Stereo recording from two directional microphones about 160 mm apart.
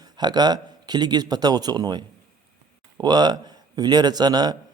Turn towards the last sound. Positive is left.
turn(degrees=-25)  # may be behind; listen again after turning